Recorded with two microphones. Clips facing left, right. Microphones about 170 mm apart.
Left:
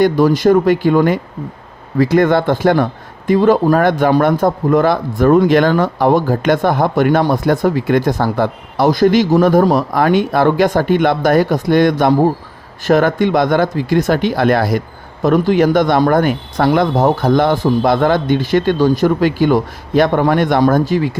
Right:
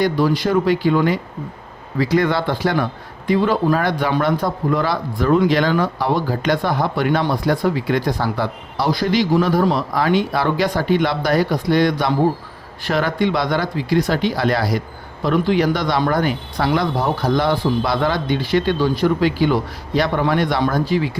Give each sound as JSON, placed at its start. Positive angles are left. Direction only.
{"t": 0.0, "sound": "a man's voice", "side_deg": 45}